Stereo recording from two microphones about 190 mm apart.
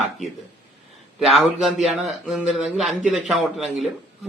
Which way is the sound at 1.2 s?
Centre (ahead or behind).